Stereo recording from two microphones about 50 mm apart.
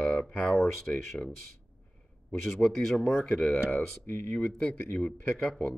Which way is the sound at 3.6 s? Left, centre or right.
Left.